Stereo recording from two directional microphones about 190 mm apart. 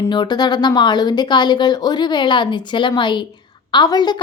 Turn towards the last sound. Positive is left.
turn(degrees=20)  # may be behind; listen again after turning